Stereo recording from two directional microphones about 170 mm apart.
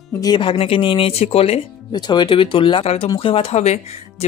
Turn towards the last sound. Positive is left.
turn(degrees=40)  # may be behind; listen again after turning